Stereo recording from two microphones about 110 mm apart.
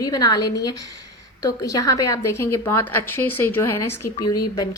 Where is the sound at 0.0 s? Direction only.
35° left (ahead or behind).